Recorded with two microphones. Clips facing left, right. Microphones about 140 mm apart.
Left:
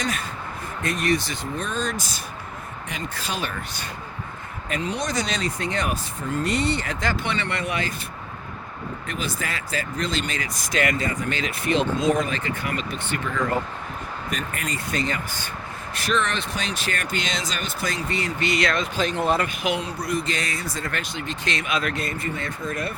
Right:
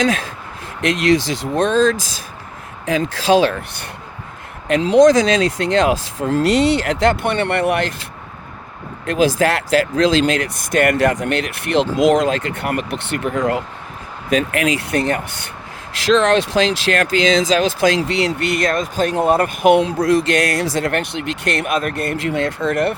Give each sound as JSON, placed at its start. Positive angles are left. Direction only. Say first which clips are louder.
{"t": 0.0, "sound": "speech", "louder": "right 10 dB", "side_deg": -90}
{"t": 4.7, "sound": "speech", "louder": "right 16 dB", "side_deg": -90}
{"t": 9.0, "sound": "speech", "louder": "right 16 dB", "side_deg": -90}
{"t": 14.3, "sound": "speech", "louder": "right 14 dB", "side_deg": -90}
{"t": 15.9, "sound": "speech", "louder": "right 11 dB", "side_deg": -90}
{"t": 19.8, "sound": "speech", "louder": "right 11 dB", "side_deg": -90}